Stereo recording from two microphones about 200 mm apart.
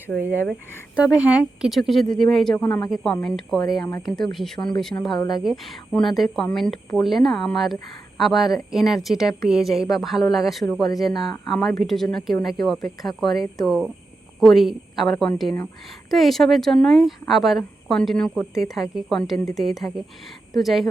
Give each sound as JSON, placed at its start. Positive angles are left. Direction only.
{"t": 0.9, "sound": "speech", "side_deg": -5}